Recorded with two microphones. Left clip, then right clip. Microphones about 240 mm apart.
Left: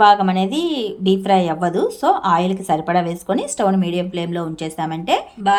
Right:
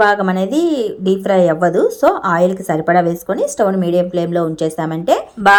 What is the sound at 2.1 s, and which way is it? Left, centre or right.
Speech, right.